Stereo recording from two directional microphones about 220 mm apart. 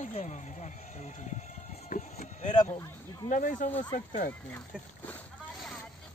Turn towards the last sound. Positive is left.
turn(degrees=30)  # may be behind; listen again after turning